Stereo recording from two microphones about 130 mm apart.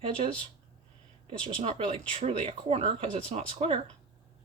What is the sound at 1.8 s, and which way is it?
Speech, 45° right (ahead or behind).